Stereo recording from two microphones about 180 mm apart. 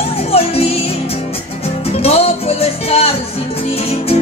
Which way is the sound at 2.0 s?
35° left (ahead or behind).